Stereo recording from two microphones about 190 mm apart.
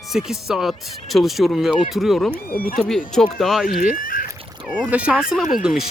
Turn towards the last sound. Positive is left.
turn(degrees=0)  # may be behind; listen again after turning